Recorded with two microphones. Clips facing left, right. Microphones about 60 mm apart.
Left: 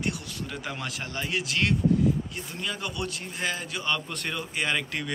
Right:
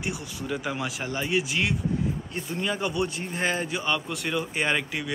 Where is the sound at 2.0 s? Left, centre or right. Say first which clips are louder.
Left 4 dB; right.